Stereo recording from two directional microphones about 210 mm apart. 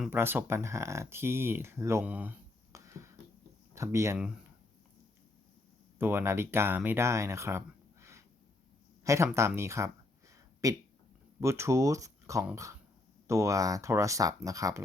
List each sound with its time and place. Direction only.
0.0 s speech: 10° right (ahead or behind)
6.0 s speech: 10° right (ahead or behind)
9.0 s a sound: 15° right (ahead or behind)
11.3 s speech: 10° right (ahead or behind)